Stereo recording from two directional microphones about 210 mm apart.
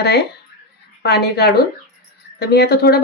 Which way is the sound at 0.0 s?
50° left (ahead or behind).